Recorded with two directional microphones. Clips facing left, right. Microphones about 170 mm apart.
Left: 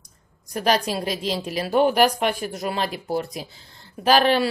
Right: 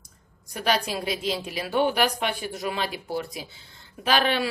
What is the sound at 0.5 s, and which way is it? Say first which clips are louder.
Speech: left 4 dB; 40° left (ahead or behind).